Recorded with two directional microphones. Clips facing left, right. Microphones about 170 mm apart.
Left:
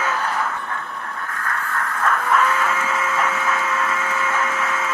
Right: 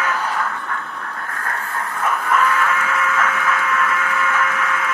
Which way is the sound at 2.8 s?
25° left (ahead or behind).